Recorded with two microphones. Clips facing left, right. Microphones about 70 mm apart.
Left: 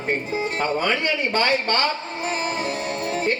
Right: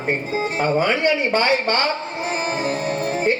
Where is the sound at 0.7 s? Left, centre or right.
Centre.